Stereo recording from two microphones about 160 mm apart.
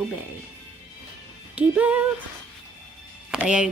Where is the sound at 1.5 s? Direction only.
10° right (ahead or behind).